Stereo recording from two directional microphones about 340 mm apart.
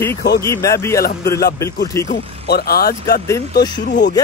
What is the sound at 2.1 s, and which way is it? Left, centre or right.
Speech, left.